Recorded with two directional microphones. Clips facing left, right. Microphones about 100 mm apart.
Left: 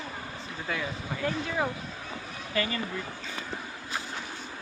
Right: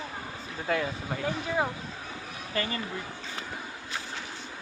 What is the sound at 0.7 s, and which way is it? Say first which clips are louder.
Speech: right 5 dB; 45° right (ahead or behind).